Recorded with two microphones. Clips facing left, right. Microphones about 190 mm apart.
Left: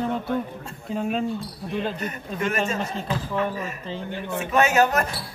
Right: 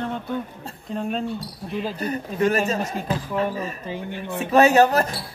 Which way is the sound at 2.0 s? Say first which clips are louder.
Right 6 dB; 35° right (ahead or behind).